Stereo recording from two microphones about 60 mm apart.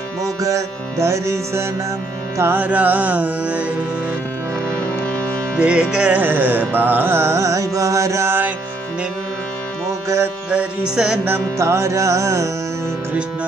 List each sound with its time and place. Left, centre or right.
0.2 s music: right
2.5 s music: right
5.6 s music: centre
6.1 s carnatic music: right
10.0 s music: right
10.5 s music: centre
11.5 s music: right